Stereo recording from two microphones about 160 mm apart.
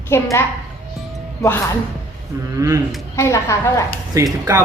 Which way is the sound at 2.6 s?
20° right (ahead or behind).